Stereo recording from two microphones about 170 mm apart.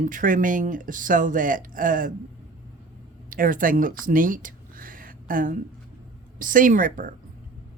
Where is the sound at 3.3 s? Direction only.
55° right (ahead or behind).